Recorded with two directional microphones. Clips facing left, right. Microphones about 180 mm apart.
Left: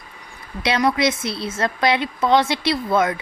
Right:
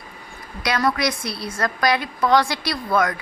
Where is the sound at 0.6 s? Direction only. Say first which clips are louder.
Left 3 dB; 25° left (ahead or behind).